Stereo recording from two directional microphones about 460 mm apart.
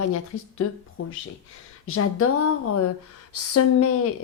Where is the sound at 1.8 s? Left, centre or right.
Left.